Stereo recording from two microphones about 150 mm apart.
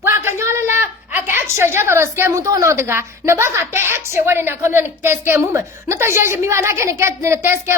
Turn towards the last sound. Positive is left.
turn(degrees=-15)  # may be behind; listen again after turning